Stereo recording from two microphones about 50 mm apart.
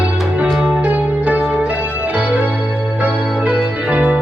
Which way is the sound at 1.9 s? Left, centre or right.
Right.